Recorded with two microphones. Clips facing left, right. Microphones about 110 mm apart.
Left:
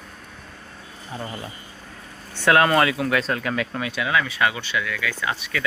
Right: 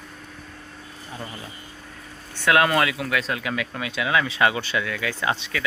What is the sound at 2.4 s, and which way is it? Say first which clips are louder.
Speech: left 2 dB; 30° left (ahead or behind).